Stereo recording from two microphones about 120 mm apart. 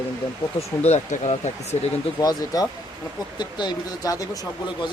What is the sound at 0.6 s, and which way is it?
Speech, 70° left (ahead or behind).